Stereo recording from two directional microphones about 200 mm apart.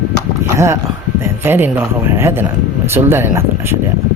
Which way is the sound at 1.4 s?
10° right (ahead or behind).